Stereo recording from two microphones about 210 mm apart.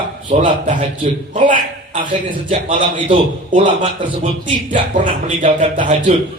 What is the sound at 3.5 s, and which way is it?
A man's voice, 35° right (ahead or behind).